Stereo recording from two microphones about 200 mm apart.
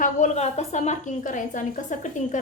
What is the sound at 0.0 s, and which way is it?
A woman's voice, 35° left (ahead or behind).